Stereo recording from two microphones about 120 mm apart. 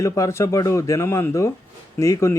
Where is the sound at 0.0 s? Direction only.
25° left (ahead or behind).